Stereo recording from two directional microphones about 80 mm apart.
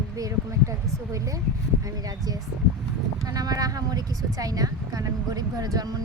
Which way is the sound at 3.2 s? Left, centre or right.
Right.